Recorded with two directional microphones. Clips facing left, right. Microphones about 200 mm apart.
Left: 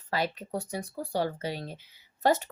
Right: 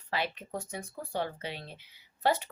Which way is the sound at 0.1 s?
40° left (ahead or behind).